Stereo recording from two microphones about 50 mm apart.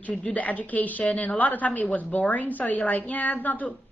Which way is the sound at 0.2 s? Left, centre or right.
Left.